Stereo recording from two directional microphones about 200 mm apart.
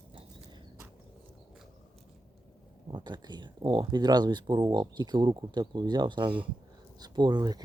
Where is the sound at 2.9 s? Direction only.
20° right (ahead or behind).